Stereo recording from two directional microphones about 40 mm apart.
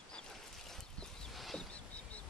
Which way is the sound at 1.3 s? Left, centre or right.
Centre.